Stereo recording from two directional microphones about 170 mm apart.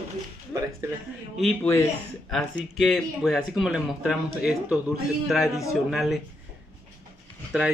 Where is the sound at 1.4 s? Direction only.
10° left (ahead or behind).